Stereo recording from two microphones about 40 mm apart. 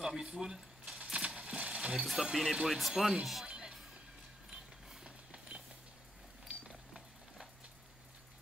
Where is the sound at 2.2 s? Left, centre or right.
Centre.